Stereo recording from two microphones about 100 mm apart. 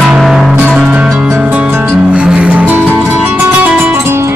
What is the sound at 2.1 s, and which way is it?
Music, 10° right (ahead or behind).